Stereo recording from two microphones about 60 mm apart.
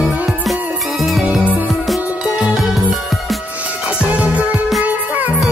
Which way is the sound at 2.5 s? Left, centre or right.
Centre.